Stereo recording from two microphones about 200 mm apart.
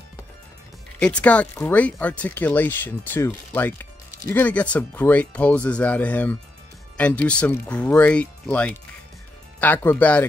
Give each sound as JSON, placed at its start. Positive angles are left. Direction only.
{"t": 0.9, "sound": "speech", "side_deg": 5}